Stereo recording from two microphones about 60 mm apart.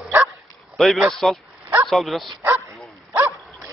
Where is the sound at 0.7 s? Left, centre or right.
Centre.